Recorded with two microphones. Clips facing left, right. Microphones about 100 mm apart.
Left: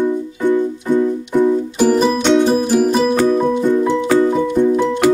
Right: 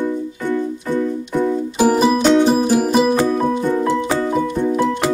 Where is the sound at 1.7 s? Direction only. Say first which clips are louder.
Right 3 dB; 5° right (ahead or behind).